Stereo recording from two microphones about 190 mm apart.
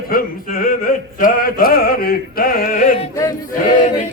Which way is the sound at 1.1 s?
50° left (ahead or behind).